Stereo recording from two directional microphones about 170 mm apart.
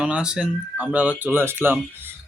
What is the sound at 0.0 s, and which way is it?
Speech, 5° right (ahead or behind).